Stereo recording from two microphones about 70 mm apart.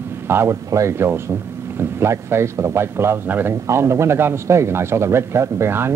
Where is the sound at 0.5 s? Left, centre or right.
Right.